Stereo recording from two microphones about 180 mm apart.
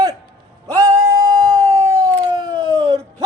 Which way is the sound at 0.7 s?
20° right (ahead or behind).